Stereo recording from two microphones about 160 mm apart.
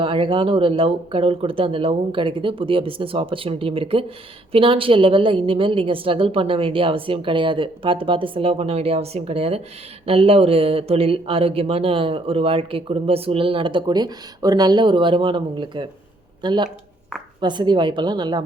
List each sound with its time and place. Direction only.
0.0 s a woman's voice: 35° right (ahead or behind)